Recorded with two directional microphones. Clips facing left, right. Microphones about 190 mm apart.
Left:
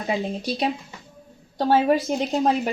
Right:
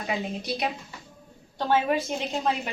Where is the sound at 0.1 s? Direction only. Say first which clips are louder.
Left 5 dB; 30° left (ahead or behind).